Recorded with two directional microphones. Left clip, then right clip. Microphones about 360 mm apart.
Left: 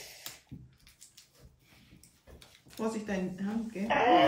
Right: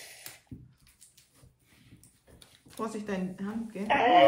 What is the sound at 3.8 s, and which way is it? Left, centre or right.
Speech, centre.